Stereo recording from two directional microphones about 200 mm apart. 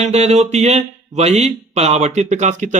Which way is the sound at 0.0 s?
35° right (ahead or behind).